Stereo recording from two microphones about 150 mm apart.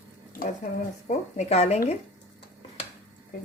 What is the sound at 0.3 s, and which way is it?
Speech, 55° left (ahead or behind).